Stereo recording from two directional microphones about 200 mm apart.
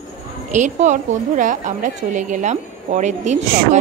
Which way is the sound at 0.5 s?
35° right (ahead or behind).